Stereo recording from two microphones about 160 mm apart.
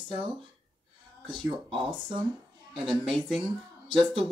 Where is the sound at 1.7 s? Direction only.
30° right (ahead or behind).